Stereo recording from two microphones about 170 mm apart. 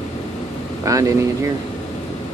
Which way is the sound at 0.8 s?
20° right (ahead or behind).